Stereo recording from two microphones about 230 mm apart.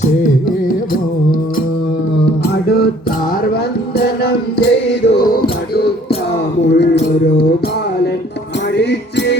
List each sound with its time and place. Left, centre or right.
2.6 s music: left
3.9 s music: left
6.7 s a sound: left
8.8 s music: left